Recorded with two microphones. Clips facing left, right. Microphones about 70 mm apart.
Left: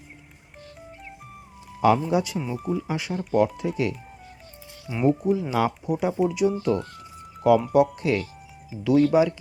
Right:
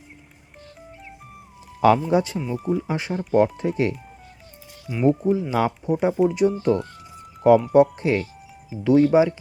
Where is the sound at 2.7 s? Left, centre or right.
Right.